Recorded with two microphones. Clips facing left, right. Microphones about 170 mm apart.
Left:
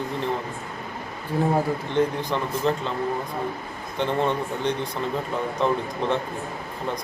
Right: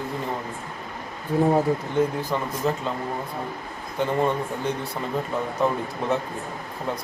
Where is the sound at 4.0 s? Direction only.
10° right (ahead or behind).